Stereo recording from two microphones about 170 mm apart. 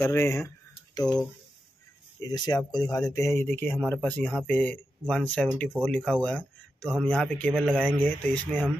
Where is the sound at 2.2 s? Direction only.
25° left (ahead or behind); by 7.6 s 5° left (ahead or behind).